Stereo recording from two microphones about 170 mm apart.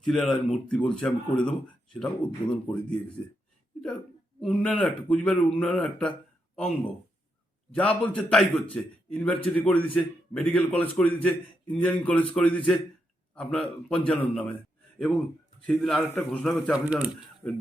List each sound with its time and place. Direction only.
0.0 s speech: centre (ahead or behind)
4.4 s a man's voice: 5° left (ahead or behind)
17.4 s a man's voice: 10° left (ahead or behind)